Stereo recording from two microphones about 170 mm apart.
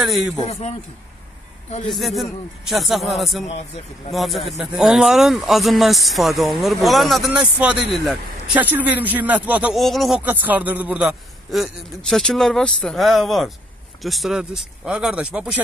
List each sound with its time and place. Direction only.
0.5 s a man's voice: 40° left (ahead or behind)
1.9 s speech: centre (ahead or behind)